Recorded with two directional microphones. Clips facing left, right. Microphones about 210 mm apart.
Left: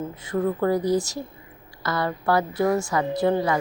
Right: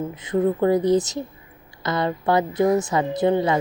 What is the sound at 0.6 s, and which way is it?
A woman's voice, 20° right (ahead or behind).